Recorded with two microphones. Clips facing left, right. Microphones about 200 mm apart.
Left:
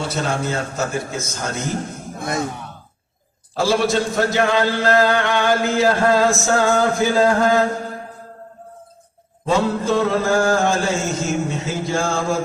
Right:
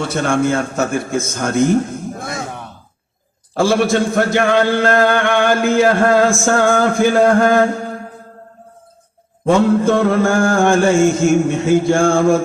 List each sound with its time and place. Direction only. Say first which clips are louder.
0.0 s a man's voice: right 6 dB; 55° right (ahead or behind)
3.5 s a man's voice: right 4 dB; 55° right (ahead or behind)
9.5 s a man's voice: right 6 dB; 55° right (ahead or behind)